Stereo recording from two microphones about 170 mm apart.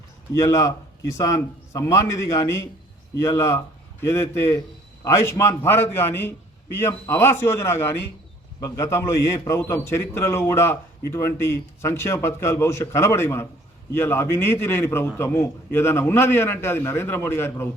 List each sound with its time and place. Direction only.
0.3 s a man's voice: 20° left (ahead or behind)